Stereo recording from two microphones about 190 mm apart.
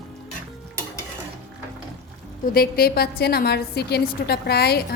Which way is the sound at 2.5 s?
50° left (ahead or behind).